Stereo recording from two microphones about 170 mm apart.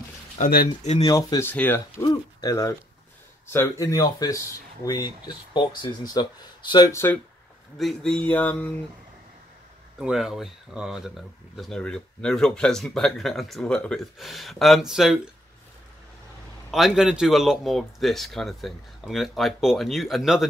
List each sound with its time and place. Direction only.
0.4 s speech: 60° left (ahead or behind)
1.0 s speech: 20° left (ahead or behind)
7.7 s speech: 5° left (ahead or behind)
9.9 s speech: 5° right (ahead or behind)
16.7 s speech: 5° right (ahead or behind)